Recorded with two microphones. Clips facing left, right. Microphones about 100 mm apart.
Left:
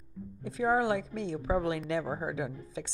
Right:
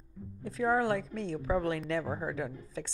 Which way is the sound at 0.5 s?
15° left (ahead or behind).